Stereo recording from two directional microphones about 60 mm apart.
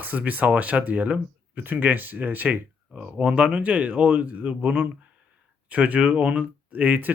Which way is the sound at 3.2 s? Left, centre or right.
Right.